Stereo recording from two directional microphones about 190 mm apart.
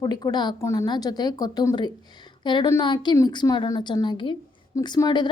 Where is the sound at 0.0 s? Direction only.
20° left (ahead or behind).